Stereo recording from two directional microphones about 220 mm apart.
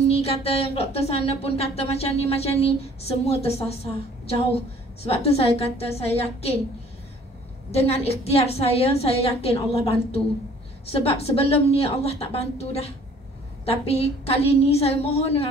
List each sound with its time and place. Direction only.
0.1 s speech: 30° left (ahead or behind)
7.7 s speech: 30° left (ahead or behind)